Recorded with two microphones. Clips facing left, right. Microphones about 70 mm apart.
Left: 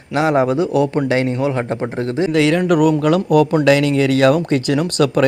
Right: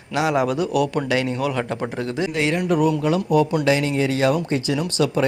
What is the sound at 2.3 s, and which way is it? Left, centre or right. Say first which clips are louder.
Speech: left 9 dB; left.